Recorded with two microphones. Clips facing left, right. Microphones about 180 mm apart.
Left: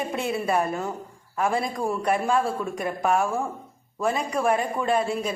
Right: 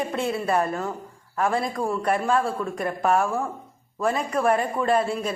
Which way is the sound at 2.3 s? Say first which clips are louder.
Right 1 dB; centre (ahead or behind).